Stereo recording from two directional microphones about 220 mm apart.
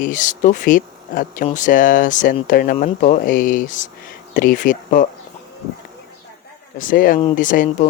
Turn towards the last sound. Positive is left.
turn(degrees=35)  # may be behind; listen again after turning